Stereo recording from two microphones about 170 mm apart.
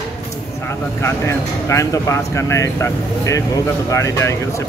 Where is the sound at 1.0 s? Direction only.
15° left (ahead or behind).